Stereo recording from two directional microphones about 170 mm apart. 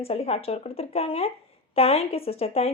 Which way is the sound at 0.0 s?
35° left (ahead or behind).